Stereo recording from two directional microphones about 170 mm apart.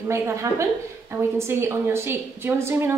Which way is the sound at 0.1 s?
15° right (ahead or behind).